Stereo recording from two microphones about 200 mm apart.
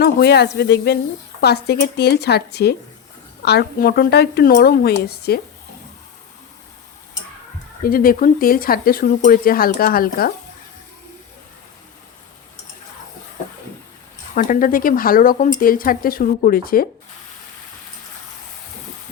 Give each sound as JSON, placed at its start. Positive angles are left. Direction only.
{"t": 0.0, "sound": "speech", "side_deg": 55}
{"t": 7.8, "sound": "speech", "side_deg": 45}
{"t": 14.3, "sound": "speech", "side_deg": 45}